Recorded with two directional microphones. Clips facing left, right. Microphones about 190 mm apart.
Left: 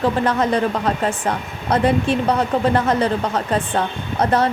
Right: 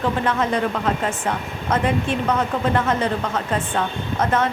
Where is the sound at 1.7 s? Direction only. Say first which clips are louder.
Left 4 dB; 35° left (ahead or behind).